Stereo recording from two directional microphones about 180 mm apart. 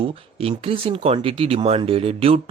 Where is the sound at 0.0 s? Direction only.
30° right (ahead or behind).